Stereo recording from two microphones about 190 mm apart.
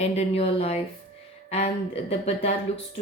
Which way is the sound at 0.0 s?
35° left (ahead or behind).